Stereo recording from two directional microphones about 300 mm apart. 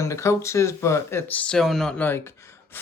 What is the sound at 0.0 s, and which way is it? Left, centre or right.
Speech, centre.